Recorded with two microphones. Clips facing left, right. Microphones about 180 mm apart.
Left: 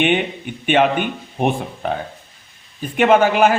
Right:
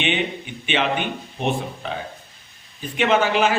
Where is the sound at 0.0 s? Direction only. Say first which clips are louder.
Left 6 dB; 50° left (ahead or behind).